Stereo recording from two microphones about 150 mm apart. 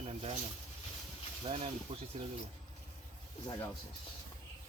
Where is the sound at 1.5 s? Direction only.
45° right (ahead or behind).